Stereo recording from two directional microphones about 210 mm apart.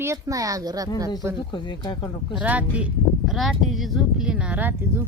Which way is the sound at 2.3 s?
5° right (ahead or behind).